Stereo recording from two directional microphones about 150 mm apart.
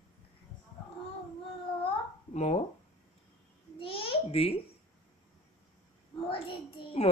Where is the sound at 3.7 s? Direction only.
35° left (ahead or behind).